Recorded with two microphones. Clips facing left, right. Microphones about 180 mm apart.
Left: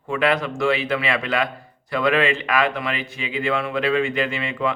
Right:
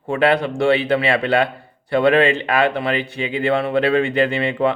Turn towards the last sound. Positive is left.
turn(degrees=-35)  # may be behind; listen again after turning